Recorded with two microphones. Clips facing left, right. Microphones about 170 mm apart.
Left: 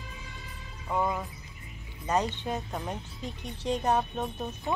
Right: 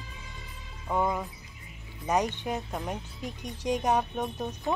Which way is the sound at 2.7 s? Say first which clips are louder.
Right 1 dB; centre (ahead or behind).